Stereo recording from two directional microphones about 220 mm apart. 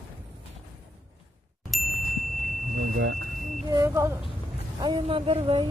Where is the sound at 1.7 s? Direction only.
Centre (ahead or behind).